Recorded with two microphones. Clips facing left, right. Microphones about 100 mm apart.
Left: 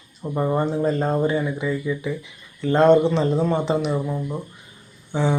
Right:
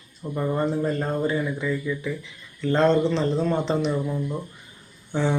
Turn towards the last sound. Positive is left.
turn(degrees=15)  # may be behind; listen again after turning